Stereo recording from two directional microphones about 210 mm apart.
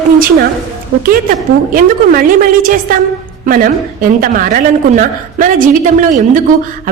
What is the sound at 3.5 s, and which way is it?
A woman's voice, 40° right (ahead or behind).